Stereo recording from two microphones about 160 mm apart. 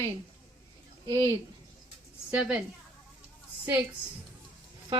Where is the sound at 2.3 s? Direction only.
5° right (ahead or behind).